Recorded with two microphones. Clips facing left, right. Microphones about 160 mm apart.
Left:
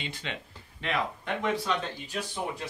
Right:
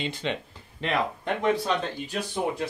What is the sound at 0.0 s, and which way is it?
Speech, 25° right (ahead or behind).